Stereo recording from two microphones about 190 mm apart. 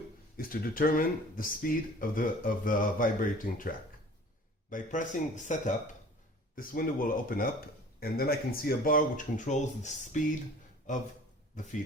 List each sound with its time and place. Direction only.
0.3 s speech: 50° left (ahead or behind)
4.7 s speech: 40° left (ahead or behind)